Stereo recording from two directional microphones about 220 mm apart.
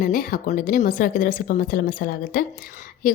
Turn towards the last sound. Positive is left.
turn(degrees=40)  # may be behind; listen again after turning